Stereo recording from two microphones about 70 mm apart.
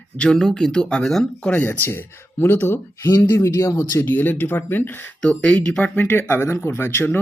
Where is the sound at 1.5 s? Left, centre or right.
Left.